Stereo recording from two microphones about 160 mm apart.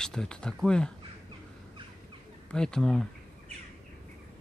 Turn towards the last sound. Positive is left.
turn(degrees=5)  # may be behind; listen again after turning